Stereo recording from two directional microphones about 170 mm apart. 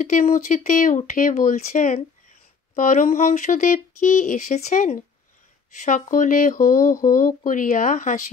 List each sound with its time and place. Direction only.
0.0 s speech: 50° left (ahead or behind)